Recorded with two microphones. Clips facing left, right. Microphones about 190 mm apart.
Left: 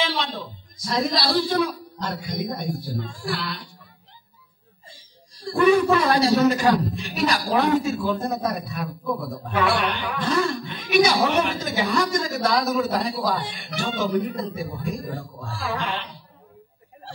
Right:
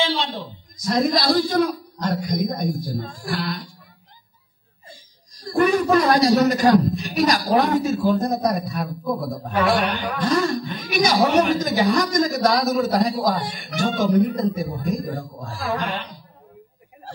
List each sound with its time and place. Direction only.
0.0 s a sound: 30° right (ahead or behind)
0.7 s a man's voice: 45° right (ahead or behind)
4.8 s speech: 45° right (ahead or behind)